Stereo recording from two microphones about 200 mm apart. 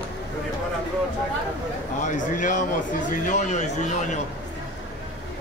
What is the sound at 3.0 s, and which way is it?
Speech, 40° left (ahead or behind).